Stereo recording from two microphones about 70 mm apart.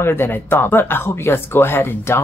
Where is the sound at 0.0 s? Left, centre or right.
Left.